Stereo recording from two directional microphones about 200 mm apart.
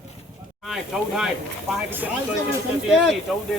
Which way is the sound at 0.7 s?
Centre (ahead or behind).